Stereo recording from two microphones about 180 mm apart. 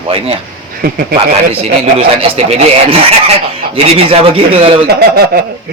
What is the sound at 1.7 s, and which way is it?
Speech, 35° right (ahead or behind).